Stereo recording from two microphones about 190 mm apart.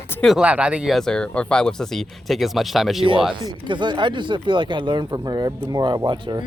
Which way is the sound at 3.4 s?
25° right (ahead or behind).